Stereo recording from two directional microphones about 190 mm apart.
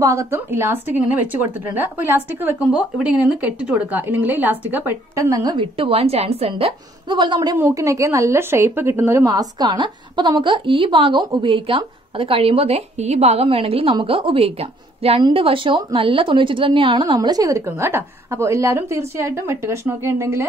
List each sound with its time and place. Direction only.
0.0 s speech: 15° right (ahead or behind)